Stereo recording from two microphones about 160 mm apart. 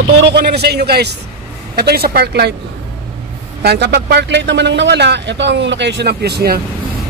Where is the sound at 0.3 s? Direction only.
90° right.